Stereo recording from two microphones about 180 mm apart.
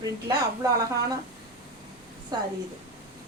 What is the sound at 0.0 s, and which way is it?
Speech, 20° right (ahead or behind).